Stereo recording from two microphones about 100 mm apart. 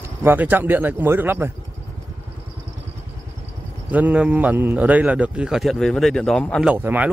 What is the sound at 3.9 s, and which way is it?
A man's voice, 15° right (ahead or behind).